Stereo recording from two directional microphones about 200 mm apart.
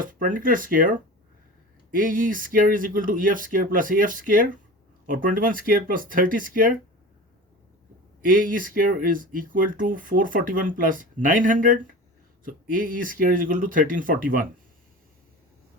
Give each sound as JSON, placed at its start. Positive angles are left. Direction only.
{"t": 0.0, "sound": "speech", "side_deg": -40}
{"t": 8.2, "sound": "speech", "side_deg": -45}